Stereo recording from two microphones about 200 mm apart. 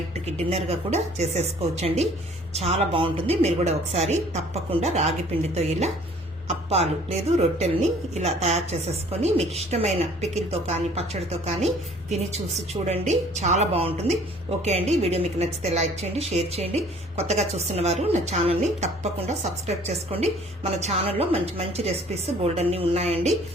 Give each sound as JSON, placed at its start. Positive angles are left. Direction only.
{"t": 0.5, "sound": "a woman's voice", "side_deg": -30}
{"t": 6.5, "sound": "a woman's voice", "side_deg": -30}